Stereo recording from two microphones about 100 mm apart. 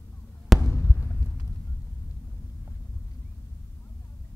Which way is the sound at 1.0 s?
30° left (ahead or behind).